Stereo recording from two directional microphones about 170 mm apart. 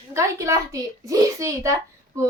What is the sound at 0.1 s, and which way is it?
A woman's voice, 15° right (ahead or behind).